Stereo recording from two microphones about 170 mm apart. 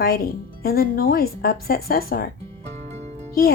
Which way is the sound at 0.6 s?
60° left (ahead or behind).